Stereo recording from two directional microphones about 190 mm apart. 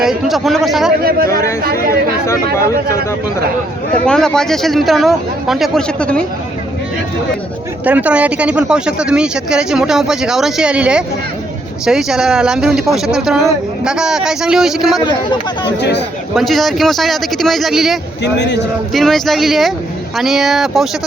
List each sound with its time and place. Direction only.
0.0 s speech: centre (ahead or behind)
1.0 s speech: 50° right (ahead or behind)
4.0 s speech: 5° left (ahead or behind)
7.9 s speech: 10° right (ahead or behind)
15.0 s speech: 25° left (ahead or behind)
15.8 s a man's voice: 65° left (ahead or behind)
16.3 s speech: centre (ahead or behind)
18.2 s a man's voice: 65° left (ahead or behind)
18.9 s speech: centre (ahead or behind)